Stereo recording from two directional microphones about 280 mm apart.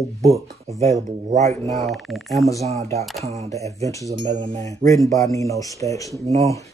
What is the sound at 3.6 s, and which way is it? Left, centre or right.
Speech, centre.